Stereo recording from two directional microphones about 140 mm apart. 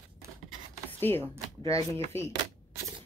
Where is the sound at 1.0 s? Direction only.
15° left (ahead or behind).